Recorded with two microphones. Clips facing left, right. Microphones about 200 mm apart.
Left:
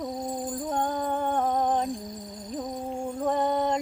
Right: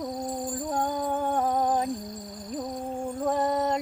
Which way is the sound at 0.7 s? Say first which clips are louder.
Even; 10° right (ahead or behind).